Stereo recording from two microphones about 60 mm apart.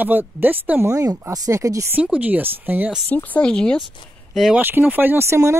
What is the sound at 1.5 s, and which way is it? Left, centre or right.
Speech, right.